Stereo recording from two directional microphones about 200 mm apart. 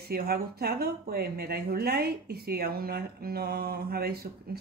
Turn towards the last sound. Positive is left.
turn(degrees=-50)  # may be behind; listen again after turning